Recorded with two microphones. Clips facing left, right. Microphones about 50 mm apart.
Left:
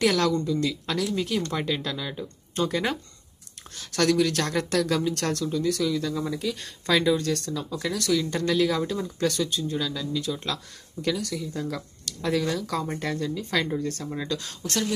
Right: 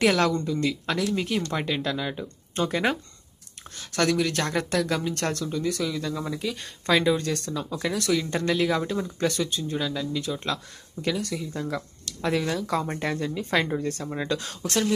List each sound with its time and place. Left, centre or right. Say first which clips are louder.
0.0 s speech: right 1 dB; centre
3.7 s speech: left 1 dB; centre; by 14.9 s right